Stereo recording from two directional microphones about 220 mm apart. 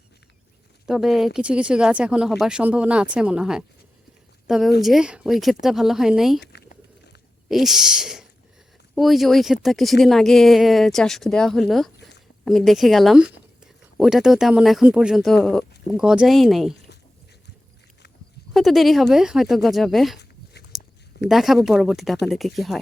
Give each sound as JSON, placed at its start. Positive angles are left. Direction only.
{"t": 0.9, "sound": "a woman's voice", "side_deg": 0}
{"t": 6.4, "sound": "a sound", "side_deg": 50}
{"t": 7.4, "sound": "speech", "side_deg": 0}
{"t": 11.9, "sound": "a sound", "side_deg": 50}
{"t": 12.5, "sound": "speech", "side_deg": 0}
{"t": 18.5, "sound": "speech", "side_deg": 0}
{"t": 20.7, "sound": "chewing", "side_deg": 0}
{"t": 21.2, "sound": "speech", "side_deg": 0}